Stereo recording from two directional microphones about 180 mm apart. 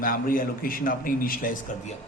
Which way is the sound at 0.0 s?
50° left (ahead or behind).